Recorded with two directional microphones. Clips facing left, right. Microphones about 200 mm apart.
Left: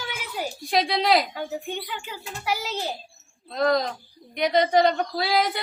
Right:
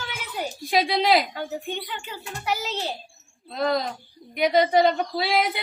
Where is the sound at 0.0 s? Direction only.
5° left (ahead or behind).